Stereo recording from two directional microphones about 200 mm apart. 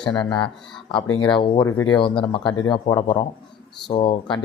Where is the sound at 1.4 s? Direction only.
25° left (ahead or behind).